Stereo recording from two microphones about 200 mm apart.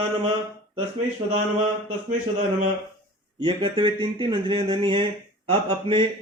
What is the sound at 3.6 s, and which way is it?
Speech, 25° right (ahead or behind).